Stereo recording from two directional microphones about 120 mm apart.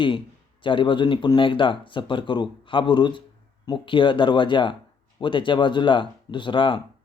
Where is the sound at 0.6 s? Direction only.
45° left (ahead or behind).